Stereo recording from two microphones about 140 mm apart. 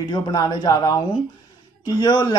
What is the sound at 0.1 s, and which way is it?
Speech, 30° left (ahead or behind).